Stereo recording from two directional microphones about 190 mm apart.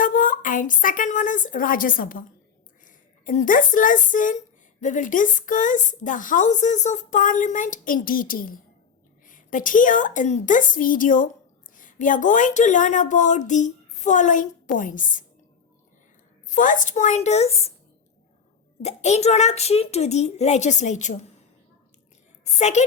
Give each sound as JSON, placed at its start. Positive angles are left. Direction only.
{"t": 0.0, "sound": "a woman's voice", "side_deg": 45}
{"t": 16.6, "sound": "a woman's voice", "side_deg": 45}
{"t": 18.8, "sound": "a woman's voice", "side_deg": 35}
{"t": 22.5, "sound": "a woman's voice", "side_deg": 35}